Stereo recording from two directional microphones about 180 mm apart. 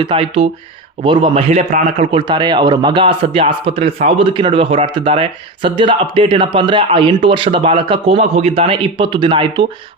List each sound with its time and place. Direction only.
0.0 s a man's voice: 30° right (ahead or behind)
2.2 s speech: 25° right (ahead or behind)